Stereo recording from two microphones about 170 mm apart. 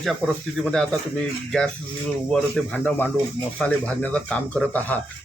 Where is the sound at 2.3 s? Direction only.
5° left (ahead or behind).